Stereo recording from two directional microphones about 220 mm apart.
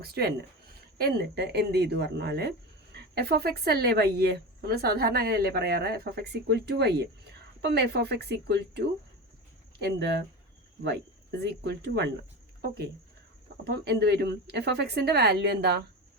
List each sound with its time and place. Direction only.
0.0 s speech: 45° right (ahead or behind)
13.7 s speech: 50° right (ahead or behind)